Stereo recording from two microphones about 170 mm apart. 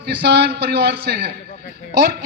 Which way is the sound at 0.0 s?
80° right.